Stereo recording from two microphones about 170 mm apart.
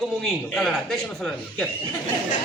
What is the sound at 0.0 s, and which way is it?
A man's voice, centre (ahead or behind).